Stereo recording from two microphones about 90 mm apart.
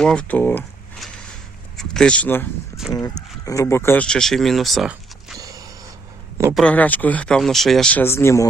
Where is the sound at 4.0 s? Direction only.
10° left (ahead or behind).